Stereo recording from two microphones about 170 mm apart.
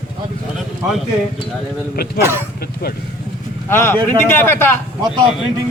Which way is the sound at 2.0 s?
65° left (ahead or behind).